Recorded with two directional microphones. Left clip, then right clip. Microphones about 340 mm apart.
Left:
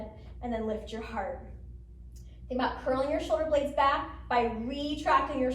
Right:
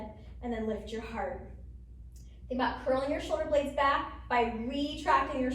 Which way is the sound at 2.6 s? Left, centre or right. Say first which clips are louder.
Left 1 dB; centre.